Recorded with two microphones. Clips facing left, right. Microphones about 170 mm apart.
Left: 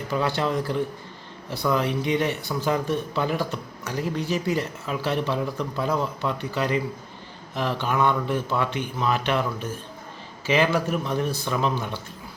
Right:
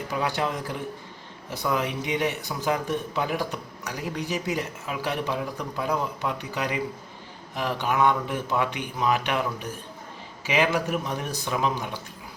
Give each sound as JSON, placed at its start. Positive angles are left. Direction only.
{"t": 0.1, "sound": "a man's voice", "side_deg": -15}